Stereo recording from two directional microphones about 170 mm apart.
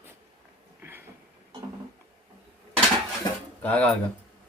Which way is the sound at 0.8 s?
10° right (ahead or behind).